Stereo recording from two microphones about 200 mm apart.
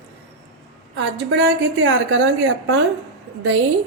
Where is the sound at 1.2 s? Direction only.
65° right (ahead or behind); by 2.8 s 80° right.